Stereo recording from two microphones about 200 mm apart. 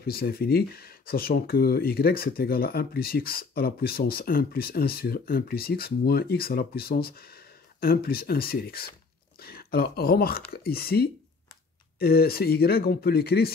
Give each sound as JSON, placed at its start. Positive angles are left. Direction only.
{"t": 0.0, "sound": "speech", "side_deg": 50}